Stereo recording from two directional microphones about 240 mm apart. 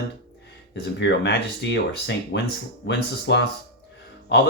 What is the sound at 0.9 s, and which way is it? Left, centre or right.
Speech, left.